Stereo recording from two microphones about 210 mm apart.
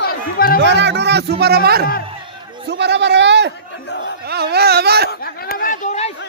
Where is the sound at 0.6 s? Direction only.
55° right (ahead or behind).